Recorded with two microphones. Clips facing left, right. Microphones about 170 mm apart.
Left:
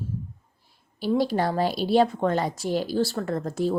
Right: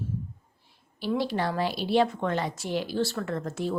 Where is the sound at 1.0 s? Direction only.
40° left (ahead or behind).